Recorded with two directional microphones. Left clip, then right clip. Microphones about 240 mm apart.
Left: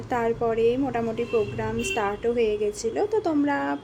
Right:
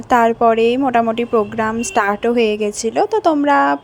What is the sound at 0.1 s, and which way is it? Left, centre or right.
A woman's voice, right.